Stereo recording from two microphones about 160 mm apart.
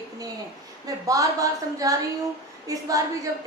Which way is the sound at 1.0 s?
20° right (ahead or behind).